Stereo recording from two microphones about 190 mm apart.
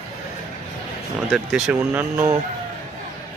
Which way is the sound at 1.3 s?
5° right (ahead or behind).